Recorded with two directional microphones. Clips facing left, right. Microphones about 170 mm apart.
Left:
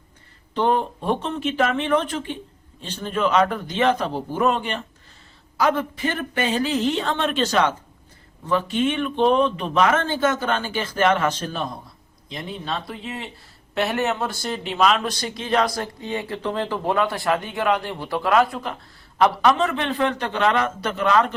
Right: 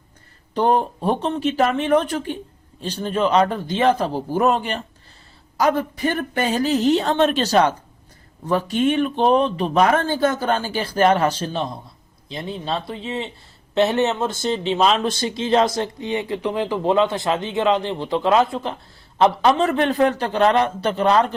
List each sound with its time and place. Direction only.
0.5 s speech: 40° right (ahead or behind)